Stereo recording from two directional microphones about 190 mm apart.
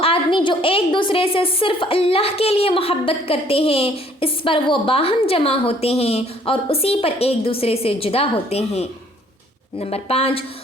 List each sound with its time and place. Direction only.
0.0 s a woman's voice: 30° left (ahead or behind)